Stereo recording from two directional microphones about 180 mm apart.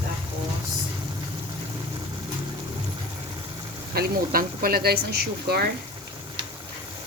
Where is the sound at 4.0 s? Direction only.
50° right (ahead or behind).